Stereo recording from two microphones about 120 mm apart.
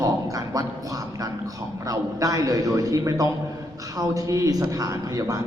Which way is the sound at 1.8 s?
30° right (ahead or behind).